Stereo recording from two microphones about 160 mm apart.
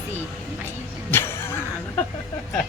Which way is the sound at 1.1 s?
15° left (ahead or behind).